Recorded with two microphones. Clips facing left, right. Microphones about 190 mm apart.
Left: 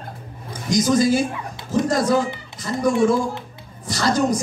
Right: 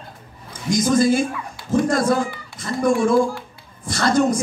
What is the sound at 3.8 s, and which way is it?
Speech, 55° right (ahead or behind).